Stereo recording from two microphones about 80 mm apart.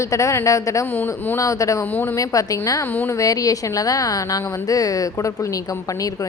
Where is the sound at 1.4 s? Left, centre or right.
Left.